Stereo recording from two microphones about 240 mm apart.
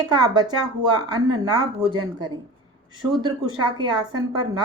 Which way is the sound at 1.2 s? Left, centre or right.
Right.